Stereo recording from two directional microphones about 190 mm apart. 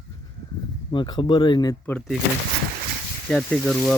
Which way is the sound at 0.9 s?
25° left (ahead or behind).